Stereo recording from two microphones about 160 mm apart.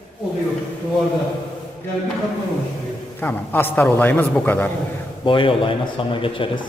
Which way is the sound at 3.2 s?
10° left (ahead or behind).